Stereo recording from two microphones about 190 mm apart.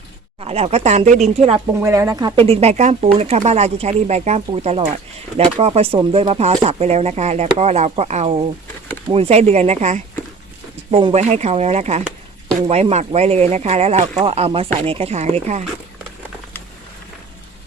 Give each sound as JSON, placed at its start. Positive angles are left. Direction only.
{"t": 0.3, "sound": "speech", "side_deg": -30}
{"t": 1.8, "sound": "speech", "side_deg": -15}